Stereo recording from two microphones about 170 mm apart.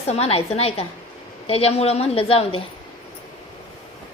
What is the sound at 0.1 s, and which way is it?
A woman's voice, 35° left (ahead or behind).